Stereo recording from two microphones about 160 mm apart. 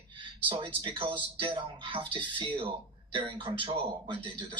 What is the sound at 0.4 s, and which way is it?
Speech, 30° right (ahead or behind).